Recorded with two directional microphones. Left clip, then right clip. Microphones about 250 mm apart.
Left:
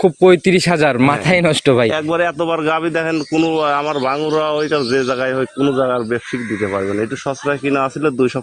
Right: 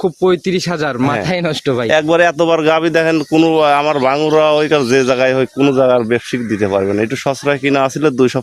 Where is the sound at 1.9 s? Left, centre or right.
Right.